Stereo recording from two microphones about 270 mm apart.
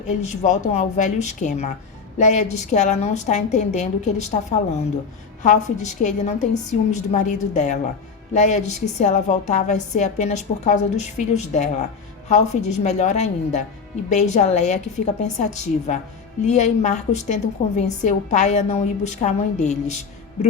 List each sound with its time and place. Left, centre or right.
0.1 s a woman's voice: left
5.4 s a woman's voice: left